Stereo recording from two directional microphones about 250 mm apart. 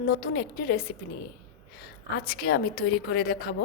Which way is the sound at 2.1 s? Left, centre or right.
Left.